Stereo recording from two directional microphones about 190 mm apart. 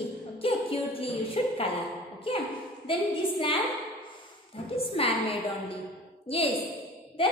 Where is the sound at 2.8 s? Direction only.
30° left (ahead or behind).